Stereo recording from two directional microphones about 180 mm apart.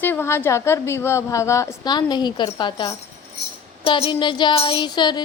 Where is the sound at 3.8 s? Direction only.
30° left (ahead or behind).